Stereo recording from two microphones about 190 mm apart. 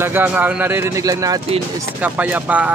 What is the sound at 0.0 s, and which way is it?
A man's voice, 10° right (ahead or behind).